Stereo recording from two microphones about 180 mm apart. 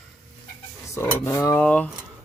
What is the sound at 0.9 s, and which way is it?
Speech, 15° left (ahead or behind).